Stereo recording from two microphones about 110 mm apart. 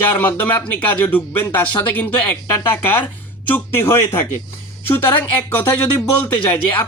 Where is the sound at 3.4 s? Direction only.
20° left (ahead or behind).